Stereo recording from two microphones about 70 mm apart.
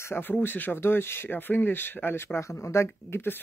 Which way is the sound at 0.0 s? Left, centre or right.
Left.